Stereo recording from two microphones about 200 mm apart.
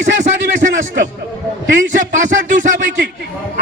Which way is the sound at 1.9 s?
40° right (ahead or behind).